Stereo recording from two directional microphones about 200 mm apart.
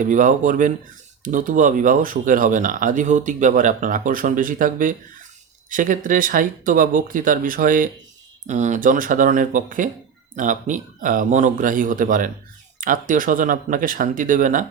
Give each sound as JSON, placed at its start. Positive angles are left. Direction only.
{"t": 0.0, "sound": "speech", "side_deg": -40}